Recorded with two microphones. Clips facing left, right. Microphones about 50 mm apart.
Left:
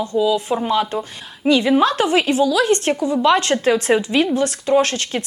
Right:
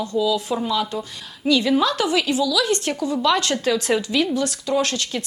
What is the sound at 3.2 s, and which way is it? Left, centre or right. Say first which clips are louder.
Speech: left 5 dB; left.